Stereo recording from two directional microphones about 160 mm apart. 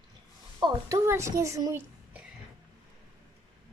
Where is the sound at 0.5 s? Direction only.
20° right (ahead or behind).